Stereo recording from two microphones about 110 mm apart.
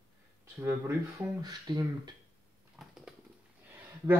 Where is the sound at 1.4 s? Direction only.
40° right (ahead or behind).